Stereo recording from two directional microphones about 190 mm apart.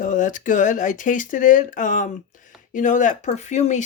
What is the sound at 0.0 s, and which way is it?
Speech, 45° left (ahead or behind).